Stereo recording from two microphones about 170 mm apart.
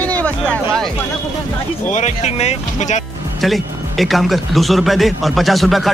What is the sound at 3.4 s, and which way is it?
Speech, centre (ahead or behind).